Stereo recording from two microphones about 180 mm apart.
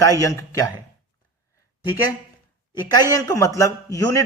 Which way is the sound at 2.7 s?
20° left (ahead or behind).